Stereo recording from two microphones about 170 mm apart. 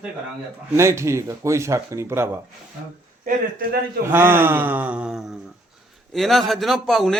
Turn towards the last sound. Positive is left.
turn(degrees=0)  # may be behind; listen again after turning